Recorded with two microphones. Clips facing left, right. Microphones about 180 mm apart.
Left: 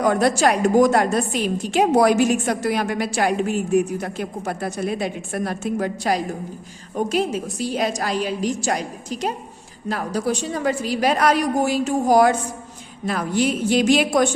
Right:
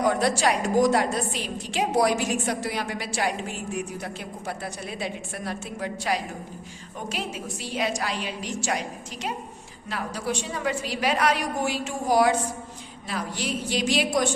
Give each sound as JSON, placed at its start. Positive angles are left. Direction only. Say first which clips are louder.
{"t": 0.0, "sound": "a woman's voice", "louder": "left 5 dB", "side_deg": 50}